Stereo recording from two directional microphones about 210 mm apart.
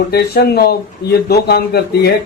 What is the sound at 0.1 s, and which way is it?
Speech, 50° left (ahead or behind).